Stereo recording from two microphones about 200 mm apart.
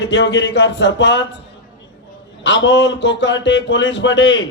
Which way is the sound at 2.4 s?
65° left (ahead or behind).